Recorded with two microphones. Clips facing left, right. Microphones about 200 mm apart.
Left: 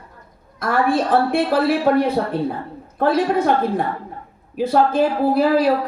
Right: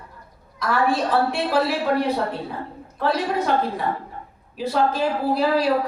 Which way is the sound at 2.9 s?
55° left (ahead or behind).